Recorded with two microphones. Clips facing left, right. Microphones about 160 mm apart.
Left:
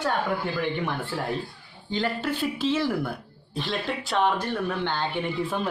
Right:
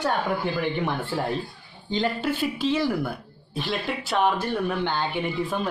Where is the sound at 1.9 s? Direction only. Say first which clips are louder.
Right 2 dB; 20° right (ahead or behind).